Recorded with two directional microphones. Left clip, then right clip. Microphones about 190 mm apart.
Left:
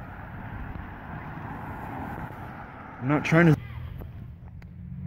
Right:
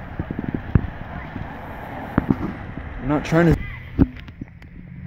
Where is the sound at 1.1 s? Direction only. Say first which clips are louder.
Right 4 dB; centre (ahead or behind).